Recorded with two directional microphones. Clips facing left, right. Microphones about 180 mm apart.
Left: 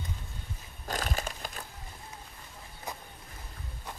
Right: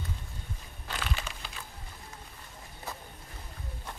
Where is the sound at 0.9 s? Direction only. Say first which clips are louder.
Left 4 dB; 40° left (ahead or behind).